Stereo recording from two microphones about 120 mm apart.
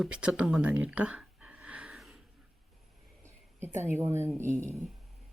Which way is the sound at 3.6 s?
20° right (ahead or behind).